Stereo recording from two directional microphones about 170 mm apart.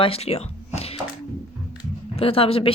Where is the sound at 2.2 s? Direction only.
35° left (ahead or behind).